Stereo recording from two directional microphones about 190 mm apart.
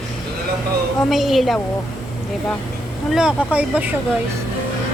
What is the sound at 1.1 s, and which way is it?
Speech, centre (ahead or behind).